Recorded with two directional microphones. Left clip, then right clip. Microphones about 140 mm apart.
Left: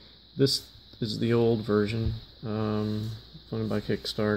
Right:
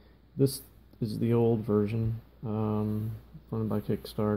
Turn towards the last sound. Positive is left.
turn(degrees=5)  # may be behind; listen again after turning